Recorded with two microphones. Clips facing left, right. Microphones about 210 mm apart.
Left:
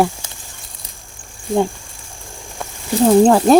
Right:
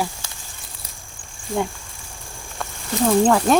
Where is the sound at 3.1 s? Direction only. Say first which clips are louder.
Left 6 dB; 30° left (ahead or behind).